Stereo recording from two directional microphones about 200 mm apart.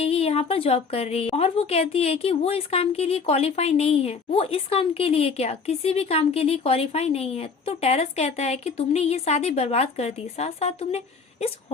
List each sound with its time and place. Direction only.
0.0 s a woman's voice: 30° left (ahead or behind)